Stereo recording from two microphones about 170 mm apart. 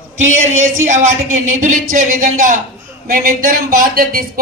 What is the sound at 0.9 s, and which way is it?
A man's voice, 45° right (ahead or behind).